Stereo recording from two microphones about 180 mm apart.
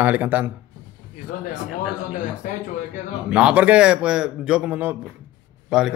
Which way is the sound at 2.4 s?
50° left (ahead or behind).